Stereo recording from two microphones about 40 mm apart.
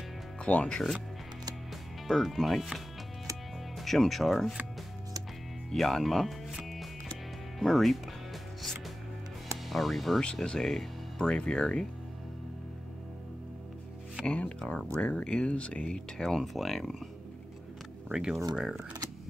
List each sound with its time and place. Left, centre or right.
0.4 s speech: left
0.7 s speech: centre
2.0 s speech: centre
5.7 s speech: centre
6.6 s music: centre
9.7 s speech: centre
10.3 s speech: left
10.6 s speech: centre
14.2 s speech: left
15.2 s speech: left
16.2 s speech: centre
18.1 s speech: centre